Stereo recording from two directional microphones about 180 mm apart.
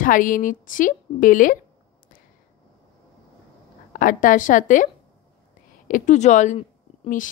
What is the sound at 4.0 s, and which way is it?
A woman's voice, 45° left (ahead or behind).